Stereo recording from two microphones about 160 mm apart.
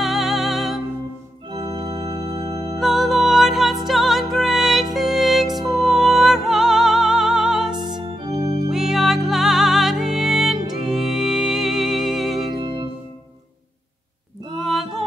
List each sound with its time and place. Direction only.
0.0 s music: centre (ahead or behind)
1.5 s organ: 25° right (ahead or behind)
2.5 s music: 25° right (ahead or behind)
2.8 s music: centre (ahead or behind)
12.5 s music: 30° right (ahead or behind)
14.6 s a sound: centre (ahead or behind)